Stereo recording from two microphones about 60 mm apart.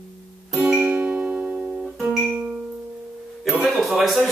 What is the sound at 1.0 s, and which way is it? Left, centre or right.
Music, right.